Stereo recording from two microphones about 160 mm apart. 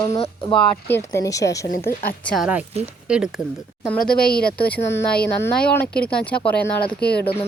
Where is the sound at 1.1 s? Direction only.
20° left (ahead or behind).